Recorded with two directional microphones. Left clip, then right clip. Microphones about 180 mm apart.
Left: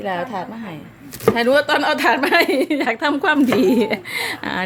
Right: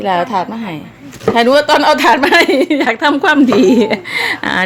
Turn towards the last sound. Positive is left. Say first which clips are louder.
# right 8 dB
turn(degrees=-5)  # may be behind; listen again after turning